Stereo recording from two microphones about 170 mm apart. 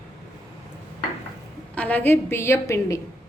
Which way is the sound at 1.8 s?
10° left (ahead or behind).